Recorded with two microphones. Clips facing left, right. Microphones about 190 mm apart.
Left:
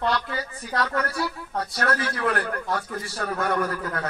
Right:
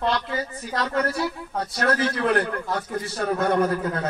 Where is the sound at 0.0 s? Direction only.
20° right (ahead or behind).